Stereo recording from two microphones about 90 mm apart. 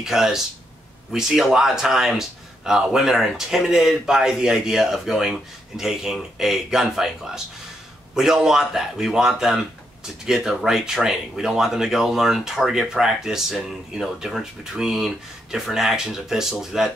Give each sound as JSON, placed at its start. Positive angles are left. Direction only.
{"t": 0.0, "sound": "speech", "side_deg": -5}